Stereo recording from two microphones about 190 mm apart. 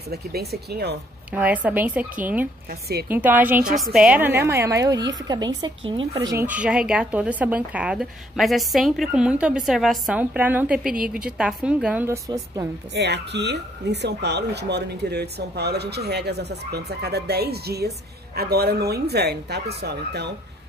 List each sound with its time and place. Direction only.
0.1 s speech: 55° right (ahead or behind)
1.3 s a woman's voice: 10° right (ahead or behind)
12.9 s speech: 65° right (ahead or behind)